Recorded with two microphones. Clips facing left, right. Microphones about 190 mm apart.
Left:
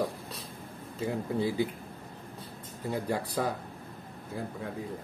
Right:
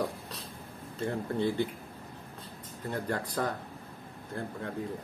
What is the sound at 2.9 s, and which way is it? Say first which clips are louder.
A man's voice: left 2 dB; 10° left (ahead or behind).